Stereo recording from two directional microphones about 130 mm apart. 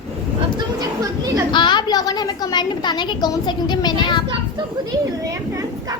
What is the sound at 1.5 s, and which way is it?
A woman's voice, 35° left (ahead or behind).